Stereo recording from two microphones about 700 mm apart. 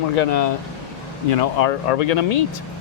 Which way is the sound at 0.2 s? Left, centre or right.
Left.